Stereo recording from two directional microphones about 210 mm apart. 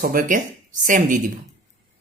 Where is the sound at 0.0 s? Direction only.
40° right (ahead or behind).